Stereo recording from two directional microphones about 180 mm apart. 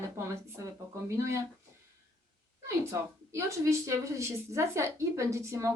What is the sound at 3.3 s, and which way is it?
A woman's voice, 15° right (ahead or behind).